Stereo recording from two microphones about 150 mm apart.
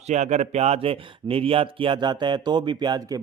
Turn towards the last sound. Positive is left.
turn(degrees=-25)  # may be behind; listen again after turning